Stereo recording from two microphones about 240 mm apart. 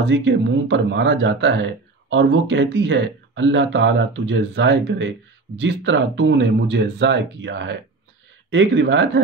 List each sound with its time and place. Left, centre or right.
0.0 s speech: right